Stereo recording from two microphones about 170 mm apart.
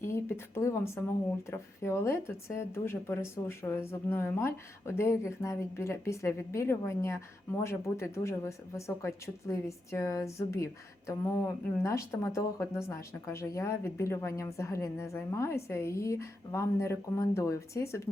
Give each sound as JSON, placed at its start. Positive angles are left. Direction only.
{"t": 0.0, "sound": "speech", "side_deg": 15}